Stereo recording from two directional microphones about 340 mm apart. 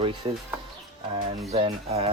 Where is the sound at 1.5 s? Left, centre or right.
Centre.